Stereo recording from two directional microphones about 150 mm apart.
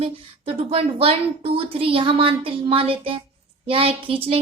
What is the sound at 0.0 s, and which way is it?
A woman's voice, 40° right (ahead or behind).